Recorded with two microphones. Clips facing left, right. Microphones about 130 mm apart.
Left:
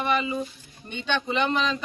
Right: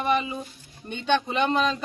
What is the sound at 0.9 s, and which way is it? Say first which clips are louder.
Speech: right 3 dB; 45° right (ahead or behind).